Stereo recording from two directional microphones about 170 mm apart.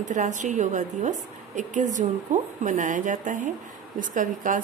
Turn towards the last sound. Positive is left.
turn(degrees=-50)  # may be behind; listen again after turning